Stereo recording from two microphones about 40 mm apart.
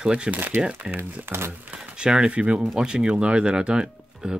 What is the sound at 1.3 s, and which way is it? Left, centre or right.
Speech, right.